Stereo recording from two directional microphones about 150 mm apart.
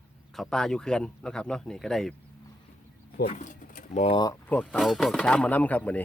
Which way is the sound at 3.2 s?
50° left (ahead or behind).